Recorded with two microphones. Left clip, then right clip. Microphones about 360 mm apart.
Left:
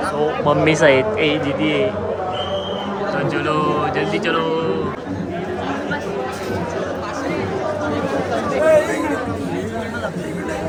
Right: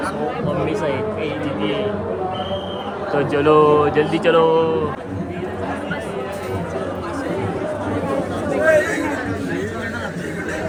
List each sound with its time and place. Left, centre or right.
0.8 s speech: left
3.2 s speech: centre
8.6 s chatter: centre